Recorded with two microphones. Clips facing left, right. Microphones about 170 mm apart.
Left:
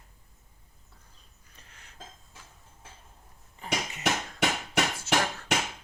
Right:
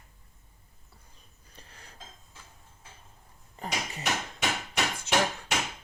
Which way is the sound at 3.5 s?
35° right (ahead or behind).